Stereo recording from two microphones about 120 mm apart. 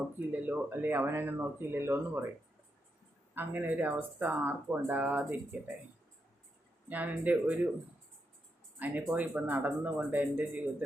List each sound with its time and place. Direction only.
0.2 s speech: 15° right (ahead or behind)
3.3 s speech: 15° right (ahead or behind)
6.8 s speech: 15° right (ahead or behind)
8.8 s speech: 15° right (ahead or behind)